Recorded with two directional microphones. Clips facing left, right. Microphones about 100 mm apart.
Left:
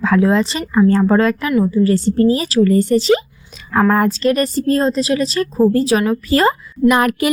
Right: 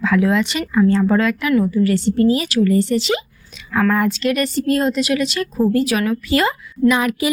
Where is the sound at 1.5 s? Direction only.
25° left (ahead or behind).